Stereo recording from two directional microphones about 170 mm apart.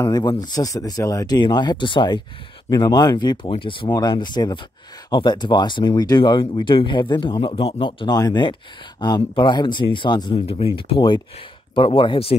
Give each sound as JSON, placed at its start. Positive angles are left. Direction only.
{"t": 0.0, "sound": "speech", "side_deg": 25}